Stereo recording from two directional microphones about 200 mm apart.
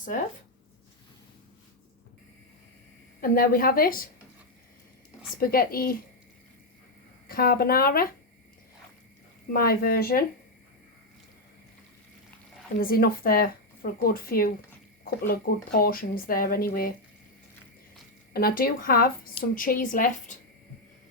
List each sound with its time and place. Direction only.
3.2 s speech: 45° left (ahead or behind)
5.4 s speech: 45° left (ahead or behind)
7.3 s speech: 45° left (ahead or behind)
9.5 s speech: 50° left (ahead or behind)
12.8 s speech: 45° left (ahead or behind)
18.3 s speech: 50° left (ahead or behind)